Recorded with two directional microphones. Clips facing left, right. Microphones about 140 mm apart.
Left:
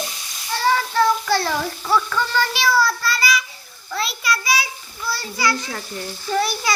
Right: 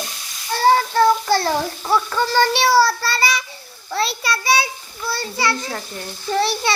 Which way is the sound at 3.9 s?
30° right (ahead or behind).